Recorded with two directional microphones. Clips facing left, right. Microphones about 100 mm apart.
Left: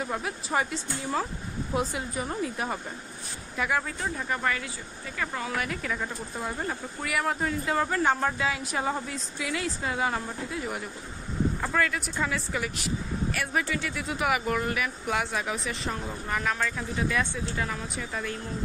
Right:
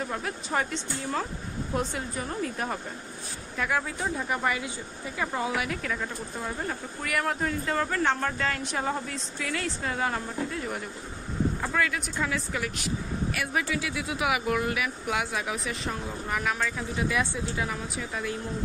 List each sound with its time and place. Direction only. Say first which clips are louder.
0.0 s speech: left 1 dB; 5° left (ahead or behind)
4.0 s speech: right 1 dB; 10° right (ahead or behind)
5.6 s speech: even; centre (ahead or behind)